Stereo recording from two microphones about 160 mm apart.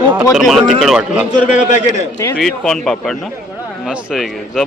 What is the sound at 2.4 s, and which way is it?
A man's voice, centre (ahead or behind).